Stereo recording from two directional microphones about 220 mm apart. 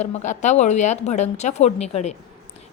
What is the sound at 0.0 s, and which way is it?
A woman's voice, 30° left (ahead or behind).